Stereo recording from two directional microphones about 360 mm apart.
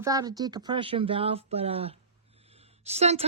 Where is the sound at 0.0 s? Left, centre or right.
Centre.